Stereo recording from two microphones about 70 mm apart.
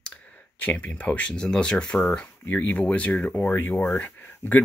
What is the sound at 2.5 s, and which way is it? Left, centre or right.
Speech, left.